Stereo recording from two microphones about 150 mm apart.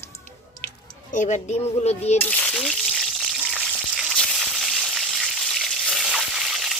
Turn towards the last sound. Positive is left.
turn(degrees=0)  # may be behind; listen again after turning